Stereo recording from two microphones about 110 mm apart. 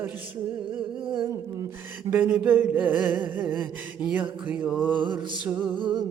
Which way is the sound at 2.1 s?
15° right (ahead or behind).